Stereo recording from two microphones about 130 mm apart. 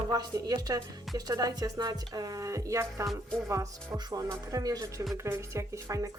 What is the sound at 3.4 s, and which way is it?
Speech, 25° right (ahead or behind).